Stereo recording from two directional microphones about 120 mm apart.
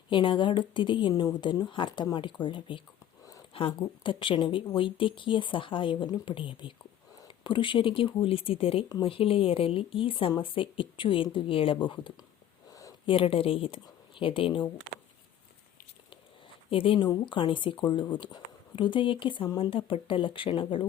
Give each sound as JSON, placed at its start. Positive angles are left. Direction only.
{"t": 0.1, "sound": "a woman's voice", "side_deg": 40}
{"t": 16.6, "sound": "speech", "side_deg": 50}